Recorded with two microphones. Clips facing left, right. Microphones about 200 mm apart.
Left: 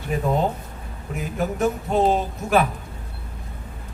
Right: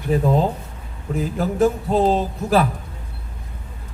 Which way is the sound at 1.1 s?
30° right (ahead or behind).